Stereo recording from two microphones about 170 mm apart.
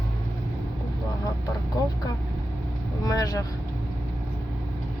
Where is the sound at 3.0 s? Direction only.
20° left (ahead or behind).